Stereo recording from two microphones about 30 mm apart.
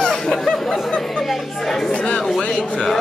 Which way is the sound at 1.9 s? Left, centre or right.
Left.